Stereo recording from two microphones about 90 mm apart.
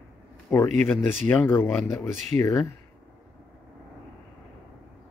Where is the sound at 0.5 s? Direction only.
25° left (ahead or behind).